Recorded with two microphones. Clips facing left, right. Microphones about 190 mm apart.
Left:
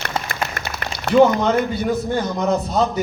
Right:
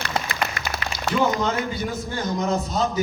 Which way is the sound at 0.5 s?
55° left (ahead or behind).